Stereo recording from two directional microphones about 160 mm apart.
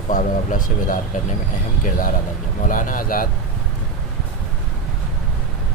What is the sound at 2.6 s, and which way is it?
Speech, 55° left (ahead or behind).